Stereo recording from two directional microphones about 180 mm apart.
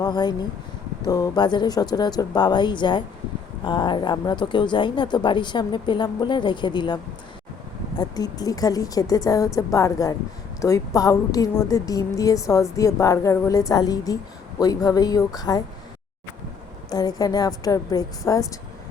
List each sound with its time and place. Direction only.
0.0 s a woman's voice: 25° left (ahead or behind)
16.9 s a woman's voice: 20° left (ahead or behind)